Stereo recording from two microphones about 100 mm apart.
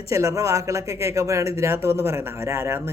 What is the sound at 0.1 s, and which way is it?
Speech, 30° right (ahead or behind).